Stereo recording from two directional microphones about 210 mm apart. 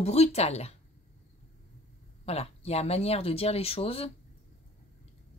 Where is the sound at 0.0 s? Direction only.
30° left (ahead or behind).